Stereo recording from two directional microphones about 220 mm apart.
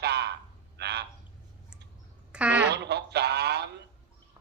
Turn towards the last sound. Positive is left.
turn(degrees=-50)  # may be behind; listen again after turning